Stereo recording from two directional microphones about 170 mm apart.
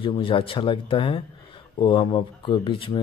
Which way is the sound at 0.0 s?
30° left (ahead or behind).